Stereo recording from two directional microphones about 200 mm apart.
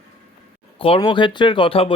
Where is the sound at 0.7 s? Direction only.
25° left (ahead or behind).